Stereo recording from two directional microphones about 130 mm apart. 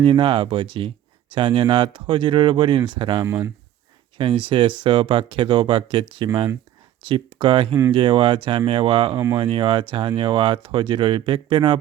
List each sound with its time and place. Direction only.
0.0 s speech: 40° right (ahead or behind)